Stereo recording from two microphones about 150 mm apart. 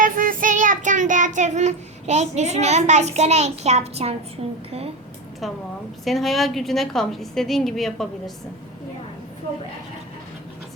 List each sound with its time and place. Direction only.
0.0 s child singing: 65° right (ahead or behind); by 4.1 s 45° right (ahead or behind)
4.4 s a woman's voice: 40° right (ahead or behind)
6.1 s a woman's voice: centre (ahead or behind)